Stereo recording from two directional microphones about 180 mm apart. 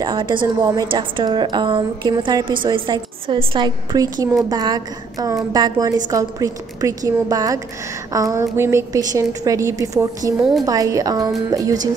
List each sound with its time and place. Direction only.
0.0 s a woman's voice: 25° right (ahead or behind)